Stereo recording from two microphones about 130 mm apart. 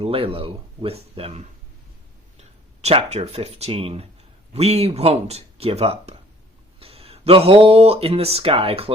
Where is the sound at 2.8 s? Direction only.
55° right (ahead or behind).